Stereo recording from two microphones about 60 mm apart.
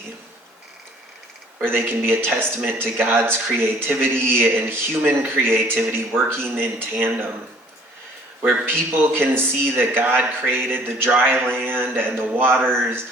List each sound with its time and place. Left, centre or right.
1.6 s speech: right
8.4 s speech: right